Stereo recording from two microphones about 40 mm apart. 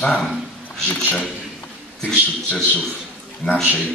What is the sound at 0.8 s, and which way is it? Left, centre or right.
Speech, left.